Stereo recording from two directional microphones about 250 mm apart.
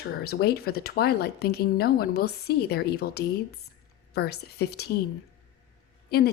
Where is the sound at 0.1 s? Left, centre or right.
Left.